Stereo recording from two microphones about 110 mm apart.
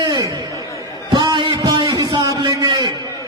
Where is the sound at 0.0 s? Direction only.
40° right (ahead or behind).